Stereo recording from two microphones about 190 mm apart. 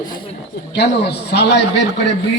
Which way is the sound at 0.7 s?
60° left (ahead or behind).